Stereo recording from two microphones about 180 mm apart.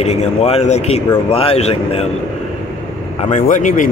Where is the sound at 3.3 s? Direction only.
45° left (ahead or behind).